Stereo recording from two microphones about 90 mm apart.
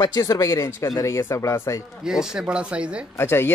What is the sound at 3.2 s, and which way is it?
Speech, 25° left (ahead or behind).